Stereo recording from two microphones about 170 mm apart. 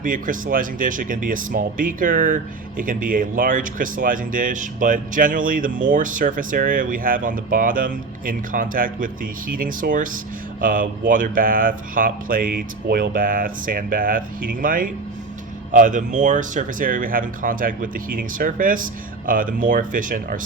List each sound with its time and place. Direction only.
0.0 s speech: 55° right (ahead or behind)